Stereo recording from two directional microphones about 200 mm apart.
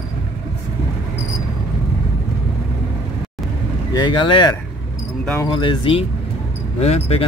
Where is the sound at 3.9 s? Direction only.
20° left (ahead or behind).